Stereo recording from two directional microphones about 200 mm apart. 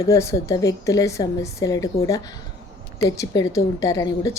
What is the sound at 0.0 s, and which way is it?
A woman's voice, 15° left (ahead or behind).